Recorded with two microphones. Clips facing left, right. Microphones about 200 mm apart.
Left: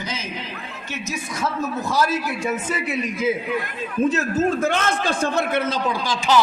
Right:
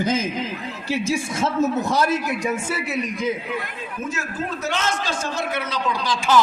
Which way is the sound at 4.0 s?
35° left (ahead or behind).